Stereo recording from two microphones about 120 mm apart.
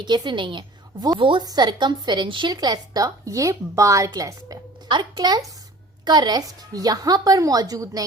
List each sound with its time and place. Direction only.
0.0 s a woman's voice: 40° right (ahead or behind)